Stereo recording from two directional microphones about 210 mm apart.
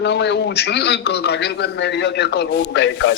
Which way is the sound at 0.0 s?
55° left (ahead or behind).